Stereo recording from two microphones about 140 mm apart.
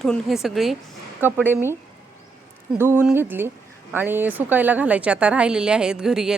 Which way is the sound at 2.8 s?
15° right (ahead or behind).